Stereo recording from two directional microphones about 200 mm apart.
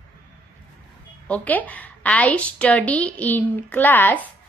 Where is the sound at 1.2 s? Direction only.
5° left (ahead or behind).